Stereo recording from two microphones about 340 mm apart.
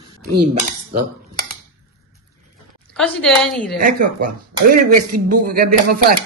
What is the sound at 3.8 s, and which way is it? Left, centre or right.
Speech, right.